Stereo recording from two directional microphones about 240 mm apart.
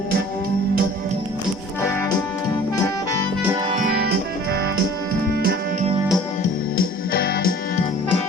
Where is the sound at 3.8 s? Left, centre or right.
Right.